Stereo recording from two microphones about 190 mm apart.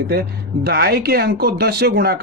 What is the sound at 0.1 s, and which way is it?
Speech, 55° right (ahead or behind).